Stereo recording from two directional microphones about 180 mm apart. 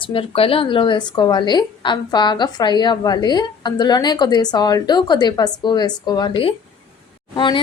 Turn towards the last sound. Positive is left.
turn(degrees=25)  # may be behind; listen again after turning